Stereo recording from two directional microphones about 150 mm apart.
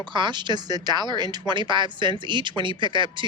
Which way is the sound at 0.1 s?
30° right (ahead or behind).